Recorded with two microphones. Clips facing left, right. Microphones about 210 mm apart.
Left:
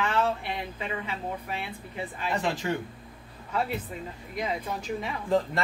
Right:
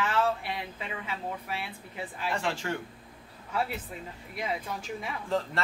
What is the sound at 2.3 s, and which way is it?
Speech, 20° left (ahead or behind).